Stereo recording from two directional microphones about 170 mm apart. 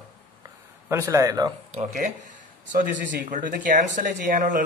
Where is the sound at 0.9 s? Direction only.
15° right (ahead or behind).